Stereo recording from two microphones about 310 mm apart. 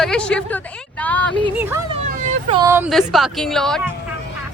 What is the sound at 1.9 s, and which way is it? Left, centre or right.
Vehicle, centre.